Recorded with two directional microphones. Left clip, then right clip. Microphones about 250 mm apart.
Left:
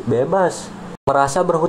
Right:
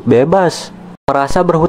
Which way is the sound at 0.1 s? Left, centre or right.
Right.